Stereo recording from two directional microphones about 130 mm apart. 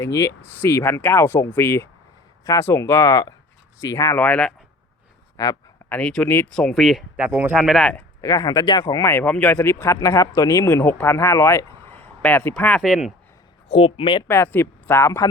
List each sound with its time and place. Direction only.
0.0 s speech: 25° left (ahead or behind)
4.2 s speech: 10° left (ahead or behind)
5.9 s speech: 10° left (ahead or behind)
6.5 s speech: 5° left (ahead or behind)
7.2 s speech: 15° right (ahead or behind)
7.5 s speech: centre (ahead or behind)
8.2 s speech: 30° left (ahead or behind); by 12.8 s 5° left (ahead or behind)
12.8 s speech: 5° right (ahead or behind)
13.7 s speech: 45° left (ahead or behind)
14.3 s speech: 20° left (ahead or behind)